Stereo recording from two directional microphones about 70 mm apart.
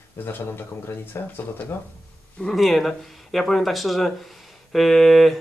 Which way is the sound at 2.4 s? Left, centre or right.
Centre.